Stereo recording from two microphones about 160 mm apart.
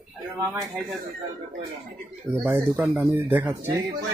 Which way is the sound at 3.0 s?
10° right (ahead or behind).